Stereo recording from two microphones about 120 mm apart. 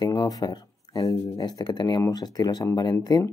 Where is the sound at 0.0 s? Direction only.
35° left (ahead or behind).